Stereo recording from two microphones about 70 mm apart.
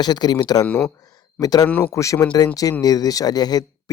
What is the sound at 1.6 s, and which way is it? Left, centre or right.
Speech, left.